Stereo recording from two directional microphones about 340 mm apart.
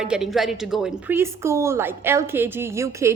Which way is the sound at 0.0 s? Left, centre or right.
Centre.